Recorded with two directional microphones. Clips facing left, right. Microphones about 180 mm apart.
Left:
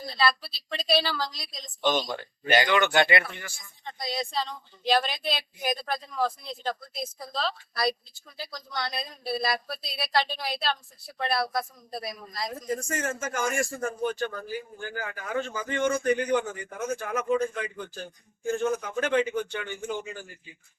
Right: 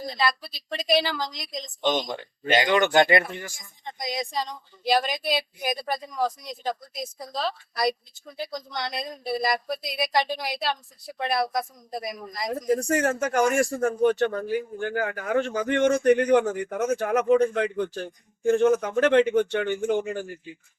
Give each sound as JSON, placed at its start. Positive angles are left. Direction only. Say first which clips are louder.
{"t": 0.0, "sound": "a woman's voice", "louder": "even", "side_deg": -15}
{"t": 3.0, "sound": "speech", "louder": "right 4 dB", "side_deg": -45}
{"t": 3.5, "sound": "a woman's voice", "louder": "right 2 dB", "side_deg": -15}
{"t": 12.5, "sound": "speech", "louder": "right 9 dB", "side_deg": -45}
{"t": 12.9, "sound": "speech", "louder": "right 8 dB", "side_deg": -65}